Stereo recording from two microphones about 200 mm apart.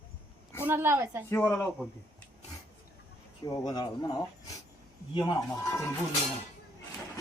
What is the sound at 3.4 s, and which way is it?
Speech, 20° left (ahead or behind).